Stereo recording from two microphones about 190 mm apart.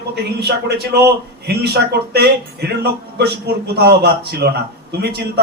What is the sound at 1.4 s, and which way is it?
Speech, 60° right (ahead or behind).